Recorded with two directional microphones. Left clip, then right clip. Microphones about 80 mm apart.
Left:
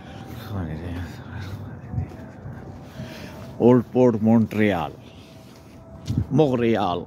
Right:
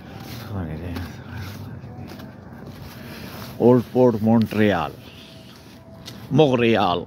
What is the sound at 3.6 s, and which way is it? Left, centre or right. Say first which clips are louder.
Speech: right 1 dB; left.